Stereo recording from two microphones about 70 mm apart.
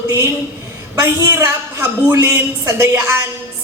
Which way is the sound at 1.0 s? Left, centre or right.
Right.